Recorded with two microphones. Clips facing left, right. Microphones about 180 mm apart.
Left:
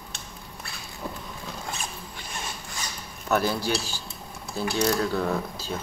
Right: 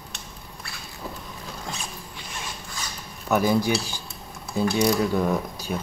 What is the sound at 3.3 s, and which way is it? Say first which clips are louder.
Speech: right 4 dB; 15° right (ahead or behind).